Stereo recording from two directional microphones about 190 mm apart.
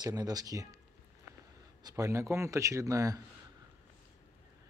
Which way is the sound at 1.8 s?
15° right (ahead or behind).